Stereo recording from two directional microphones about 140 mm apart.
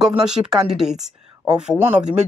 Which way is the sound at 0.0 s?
5° right (ahead or behind).